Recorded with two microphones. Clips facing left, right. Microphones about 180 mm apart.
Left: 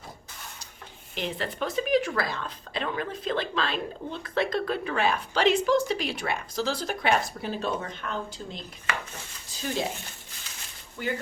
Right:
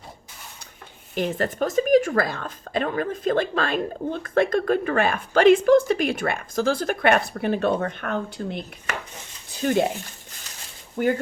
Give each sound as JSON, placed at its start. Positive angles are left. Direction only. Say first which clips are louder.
{"t": 1.1, "sound": "speech", "louder": "right 7 dB", "side_deg": -45}
{"t": 11.0, "sound": "speech", "louder": "right 10 dB", "side_deg": -50}